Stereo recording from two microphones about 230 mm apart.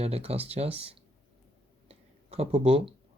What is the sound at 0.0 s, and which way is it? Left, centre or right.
Speech, right.